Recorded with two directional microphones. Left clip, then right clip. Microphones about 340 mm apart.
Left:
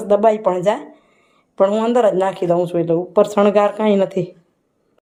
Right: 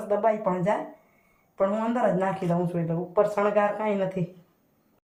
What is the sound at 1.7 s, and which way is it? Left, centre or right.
Speech, centre.